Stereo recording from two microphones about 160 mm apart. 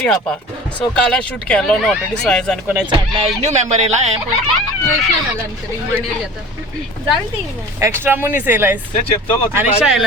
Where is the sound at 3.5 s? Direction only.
45° right (ahead or behind).